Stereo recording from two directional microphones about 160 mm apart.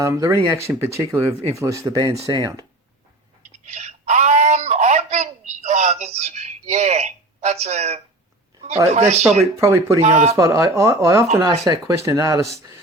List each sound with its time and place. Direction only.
0.0 s speech: 20° right (ahead or behind)
3.7 s a sound: 45° right (ahead or behind)
8.9 s speech: 45° right (ahead or behind)
9.6 s speech: 20° right (ahead or behind)
10.0 s speech: 45° right (ahead or behind)
10.3 s speech: 20° right (ahead or behind)